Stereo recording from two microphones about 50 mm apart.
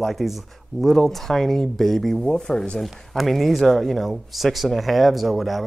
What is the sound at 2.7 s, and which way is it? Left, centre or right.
Speech, centre.